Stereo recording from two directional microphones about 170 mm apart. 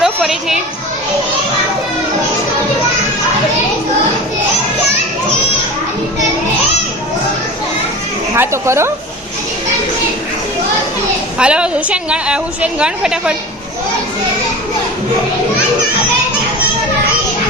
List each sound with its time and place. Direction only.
0.0 s children playing: centre (ahead or behind)
8.4 s a woman's voice: 15° right (ahead or behind)
11.3 s a woman's voice: 5° right (ahead or behind)